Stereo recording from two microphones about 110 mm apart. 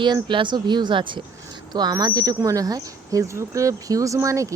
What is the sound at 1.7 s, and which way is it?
Speech, 40° right (ahead or behind).